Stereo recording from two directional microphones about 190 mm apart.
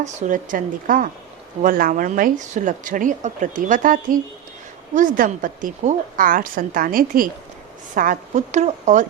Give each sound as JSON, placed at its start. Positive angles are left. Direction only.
{"t": 0.0, "sound": "a woman's voice", "side_deg": -40}